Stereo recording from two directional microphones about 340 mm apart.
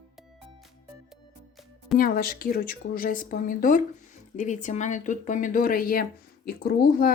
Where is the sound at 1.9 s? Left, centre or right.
Left.